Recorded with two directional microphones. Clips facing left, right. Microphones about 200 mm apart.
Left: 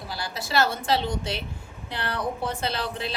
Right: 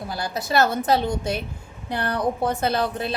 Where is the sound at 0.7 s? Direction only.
45° right (ahead or behind).